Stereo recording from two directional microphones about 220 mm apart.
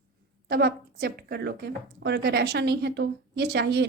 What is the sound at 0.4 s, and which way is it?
A woman's voice, 45° right (ahead or behind).